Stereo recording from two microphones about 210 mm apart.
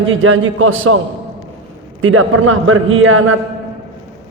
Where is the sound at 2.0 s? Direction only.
75° right (ahead or behind).